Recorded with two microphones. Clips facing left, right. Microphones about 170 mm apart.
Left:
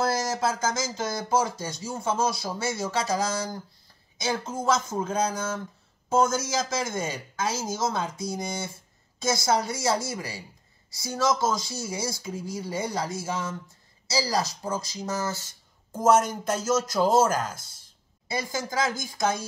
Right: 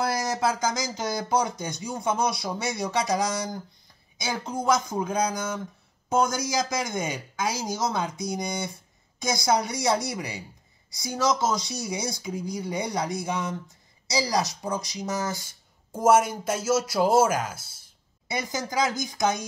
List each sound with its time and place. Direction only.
0.0 s speech: 15° right (ahead or behind)
18.3 s speech: 20° right (ahead or behind)